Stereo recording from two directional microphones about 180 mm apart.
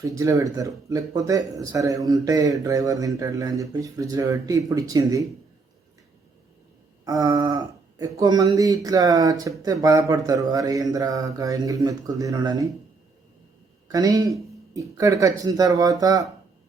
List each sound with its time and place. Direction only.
0.0 s speech: 20° right (ahead or behind)
7.0 s speech: 20° right (ahead or behind)
13.8 s speech: 20° right (ahead or behind)